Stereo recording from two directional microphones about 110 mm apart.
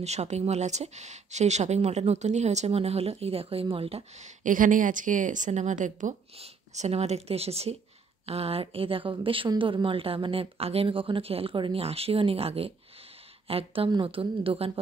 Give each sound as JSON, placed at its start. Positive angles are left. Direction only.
{"t": 0.0, "sound": "speech", "side_deg": -80}
{"t": 5.1, "sound": "a woman's voice", "side_deg": -90}
{"t": 6.3, "sound": "speech", "side_deg": -75}